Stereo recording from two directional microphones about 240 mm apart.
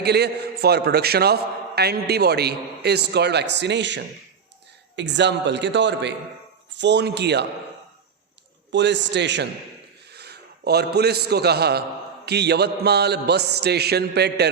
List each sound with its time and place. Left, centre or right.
0.0 s a man's voice: right
8.7 s a man's voice: right